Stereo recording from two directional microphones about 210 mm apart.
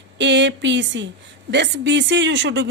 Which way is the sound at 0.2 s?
55° right (ahead or behind).